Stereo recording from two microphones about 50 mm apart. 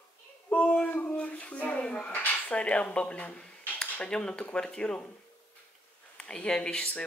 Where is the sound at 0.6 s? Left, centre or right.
Left.